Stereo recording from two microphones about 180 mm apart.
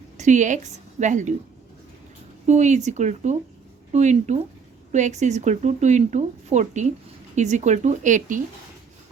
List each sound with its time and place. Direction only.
0.2 s a woman's voice: 40° right (ahead or behind)
2.5 s a woman's voice: 40° right (ahead or behind)